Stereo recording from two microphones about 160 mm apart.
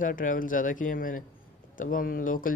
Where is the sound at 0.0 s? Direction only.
55° left (ahead or behind).